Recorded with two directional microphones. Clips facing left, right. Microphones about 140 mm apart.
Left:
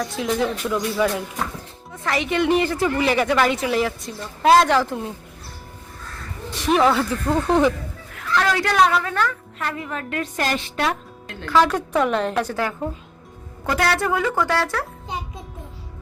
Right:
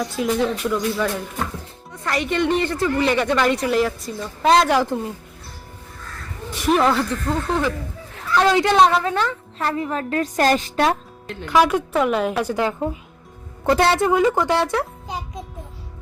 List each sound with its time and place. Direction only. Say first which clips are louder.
0.0 s a woman's voice: right 2 dB; centre (ahead or behind)
0.9 s a woman's voice: left 2 dB; 10° left (ahead or behind)
4.7 s a woman's voice: right 1 dB; 15° right (ahead or behind)
6.7 s speech: even; centre (ahead or behind); by 7.7 s 15° left (ahead or behind)
8.1 s a woman's voice: right 4 dB; 25° right (ahead or behind); by 10.9 s 40° right (ahead or behind)
11.3 s a woman's voice: right 1 dB; 15° right (ahead or behind)